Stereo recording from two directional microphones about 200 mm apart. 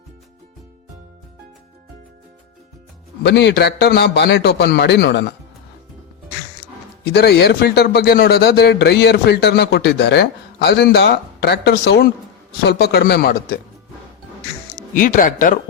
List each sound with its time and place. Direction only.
3.2 s speech: 60° left (ahead or behind)
7.0 s speech: 55° left (ahead or behind)
14.9 s speech: 40° left (ahead or behind)